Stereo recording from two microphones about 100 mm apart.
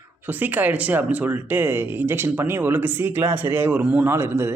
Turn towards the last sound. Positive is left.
turn(degrees=-25)  # may be behind; listen again after turning